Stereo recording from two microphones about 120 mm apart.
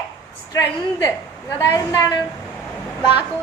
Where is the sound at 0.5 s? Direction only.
25° left (ahead or behind).